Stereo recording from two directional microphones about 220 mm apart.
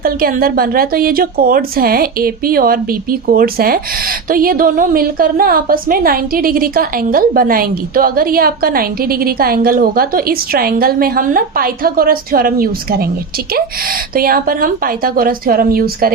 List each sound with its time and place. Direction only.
0.0 s a woman's voice: 40° right (ahead or behind)